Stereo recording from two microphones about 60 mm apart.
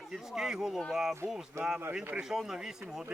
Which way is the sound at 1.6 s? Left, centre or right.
Right.